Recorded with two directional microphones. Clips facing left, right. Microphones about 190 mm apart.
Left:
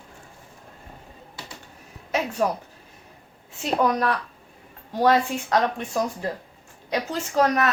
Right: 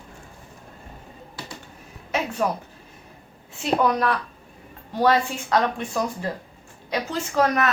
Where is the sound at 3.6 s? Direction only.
40° left (ahead or behind).